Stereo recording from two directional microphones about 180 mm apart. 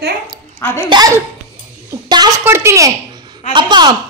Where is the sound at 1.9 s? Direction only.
25° right (ahead or behind).